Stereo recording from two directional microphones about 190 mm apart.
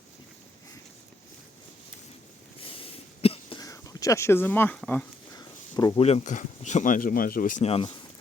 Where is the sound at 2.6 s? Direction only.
30° left (ahead or behind).